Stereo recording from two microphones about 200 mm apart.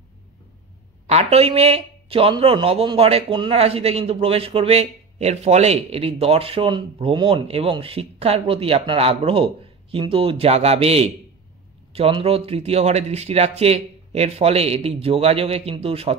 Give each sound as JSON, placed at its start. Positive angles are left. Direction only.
{"t": 1.0, "sound": "speech", "side_deg": -30}